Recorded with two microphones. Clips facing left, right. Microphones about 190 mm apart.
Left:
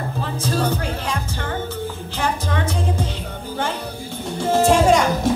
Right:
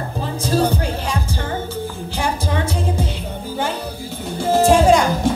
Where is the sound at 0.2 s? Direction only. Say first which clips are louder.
Right 4 dB; 15° right (ahead or behind).